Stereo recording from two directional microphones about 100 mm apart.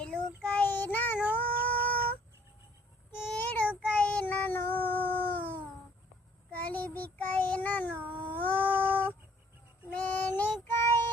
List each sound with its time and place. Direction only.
0.0 s child singing: 10° left (ahead or behind)
1.3 s female singing: 15° left (ahead or behind)
3.3 s child singing: 15° left (ahead or behind)
3.7 s child singing: 10° right (ahead or behind)
3.9 s child singing: 10° left (ahead or behind)
8.3 s cat: 15° left (ahead or behind)
8.9 s music: 20° right (ahead or behind)
9.9 s child singing: 15° left (ahead or behind)